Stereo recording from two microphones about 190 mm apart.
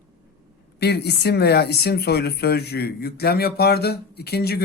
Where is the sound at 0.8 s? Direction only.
60° left (ahead or behind).